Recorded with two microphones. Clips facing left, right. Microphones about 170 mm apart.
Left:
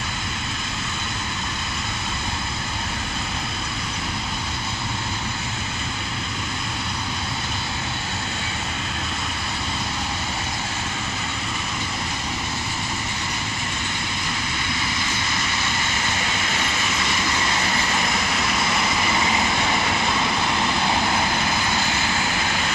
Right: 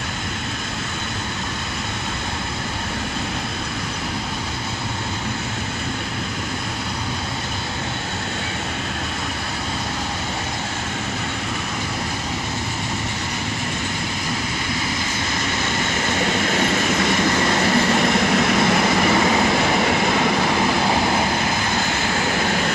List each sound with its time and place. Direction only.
16.2 s train: 45° right (ahead or behind)
20.8 s vehicle: 35° right (ahead or behind)
22.4 s vehicle: 50° right (ahead or behind)